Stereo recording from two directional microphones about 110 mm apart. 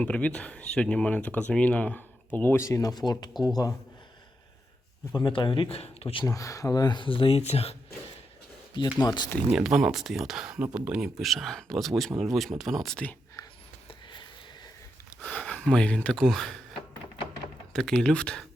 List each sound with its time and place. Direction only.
0.0 s speech: 10° left (ahead or behind); by 3.8 s 35° left (ahead or behind)
5.1 s speech: 45° left (ahead or behind); by 6.2 s 65° left (ahead or behind)
6.2 s speech: 30° left (ahead or behind); by 7.8 s 70° left (ahead or behind)
9.0 s speech: 40° left (ahead or behind)
9.5 s speech: 5° right (ahead or behind)
13.4 s a sound: 40° left (ahead or behind)
15.2 s speech: 5° left (ahead or behind)
17.7 s speech: 5° left (ahead or behind)